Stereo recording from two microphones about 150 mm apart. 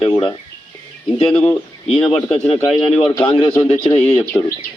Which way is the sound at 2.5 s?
40° left (ahead or behind).